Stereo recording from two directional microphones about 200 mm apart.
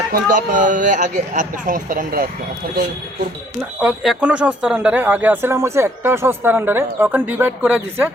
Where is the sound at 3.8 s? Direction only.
5° right (ahead or behind).